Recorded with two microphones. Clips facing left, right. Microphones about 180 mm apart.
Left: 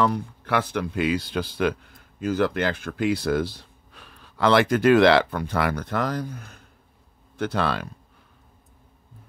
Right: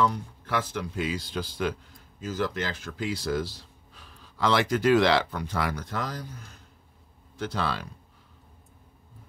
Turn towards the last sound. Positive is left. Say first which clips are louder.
# left 5 dB
turn(degrees=60)  # may be behind; listen again after turning